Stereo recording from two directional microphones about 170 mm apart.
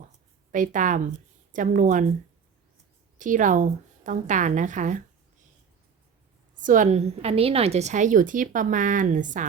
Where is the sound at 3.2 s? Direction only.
50° right (ahead or behind).